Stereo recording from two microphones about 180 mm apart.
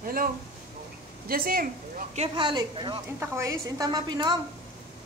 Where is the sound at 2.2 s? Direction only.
25° right (ahead or behind).